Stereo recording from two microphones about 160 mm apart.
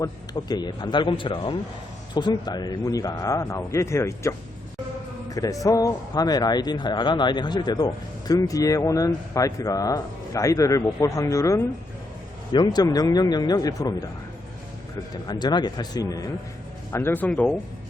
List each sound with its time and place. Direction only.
0.0 s speech: 25° left (ahead or behind)
15.1 s speech: 25° left (ahead or behind); by 17.5 s 5° left (ahead or behind)